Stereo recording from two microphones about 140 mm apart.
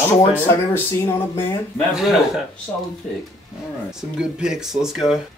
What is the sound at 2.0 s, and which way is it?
Speech, 5° right (ahead or behind).